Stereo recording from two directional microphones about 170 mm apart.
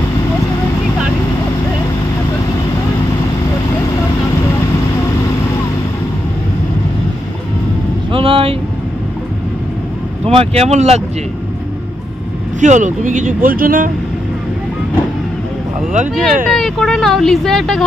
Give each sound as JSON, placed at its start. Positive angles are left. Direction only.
{"t": 8.1, "sound": "vehicle", "side_deg": -30}
{"t": 10.2, "sound": "speech", "side_deg": -35}
{"t": 12.5, "sound": "speech", "side_deg": -45}
{"t": 15.9, "sound": "speech", "side_deg": -45}
{"t": 16.5, "sound": "speech", "side_deg": 5}